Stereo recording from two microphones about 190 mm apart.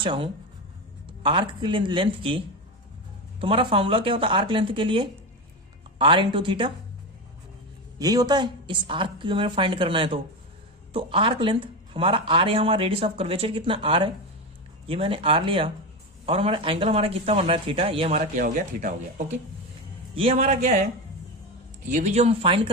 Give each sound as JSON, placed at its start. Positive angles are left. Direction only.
{"t": 0.0, "sound": "speech", "side_deg": -25}
{"t": 3.4, "sound": "speech", "side_deg": -25}
{"t": 7.9, "sound": "speech", "side_deg": -20}
{"t": 18.3, "sound": "speech", "side_deg": -45}
{"t": 20.3, "sound": "speech", "side_deg": -40}
{"t": 21.8, "sound": "speech", "side_deg": -40}